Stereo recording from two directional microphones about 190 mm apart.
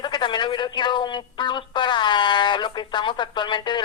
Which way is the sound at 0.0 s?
25° left (ahead or behind).